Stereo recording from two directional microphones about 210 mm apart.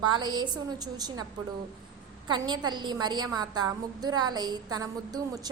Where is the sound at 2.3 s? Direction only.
20° right (ahead or behind).